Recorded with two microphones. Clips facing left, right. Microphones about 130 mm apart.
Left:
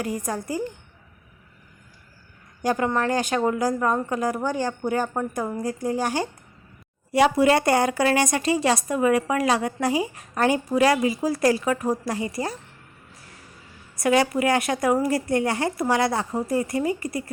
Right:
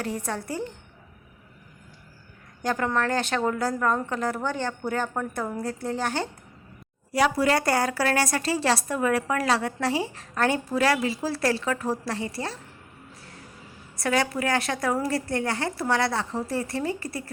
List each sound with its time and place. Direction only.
0.3 s speech: 10° left (ahead or behind)
2.6 s speech: 15° left (ahead or behind)
7.1 s a woman's voice: 25° left (ahead or behind)
14.0 s a woman's voice: 20° left (ahead or behind)